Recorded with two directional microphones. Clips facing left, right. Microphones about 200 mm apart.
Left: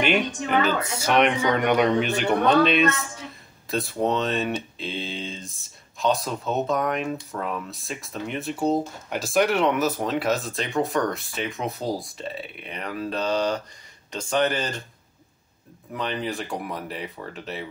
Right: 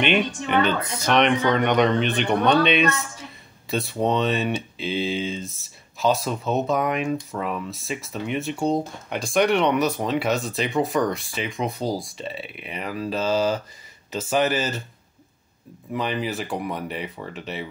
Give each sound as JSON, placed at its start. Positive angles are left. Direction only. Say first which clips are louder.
{"t": 0.0, "sound": "speech", "louder": "right 1 dB", "side_deg": 5}
{"t": 15.9, "sound": "speech", "louder": "right 2 dB", "side_deg": -5}